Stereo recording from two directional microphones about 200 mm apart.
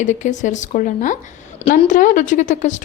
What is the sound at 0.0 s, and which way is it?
A woman's voice, 35° left (ahead or behind).